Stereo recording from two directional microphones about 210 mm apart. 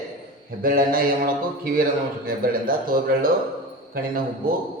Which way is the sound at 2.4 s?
45° right (ahead or behind).